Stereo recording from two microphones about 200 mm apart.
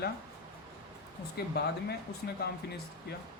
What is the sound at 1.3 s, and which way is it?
Speech, 55° left (ahead or behind).